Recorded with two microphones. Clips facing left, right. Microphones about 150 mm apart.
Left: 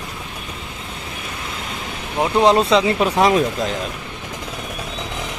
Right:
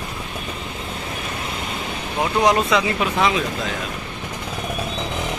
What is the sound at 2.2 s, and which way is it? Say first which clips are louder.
Speech: left 3 dB; 30° left (ahead or behind).